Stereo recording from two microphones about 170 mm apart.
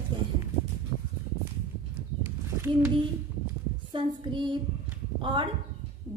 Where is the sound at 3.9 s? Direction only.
30° right (ahead or behind).